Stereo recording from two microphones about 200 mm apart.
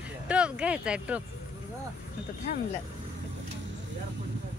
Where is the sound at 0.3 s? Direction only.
5° right (ahead or behind).